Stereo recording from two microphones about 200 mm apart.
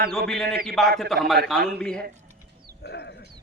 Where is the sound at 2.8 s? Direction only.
55° left (ahead or behind).